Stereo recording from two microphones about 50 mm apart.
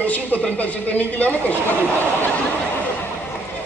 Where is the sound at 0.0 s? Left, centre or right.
Left.